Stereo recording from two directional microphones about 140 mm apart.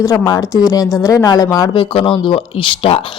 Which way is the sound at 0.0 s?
25° left (ahead or behind).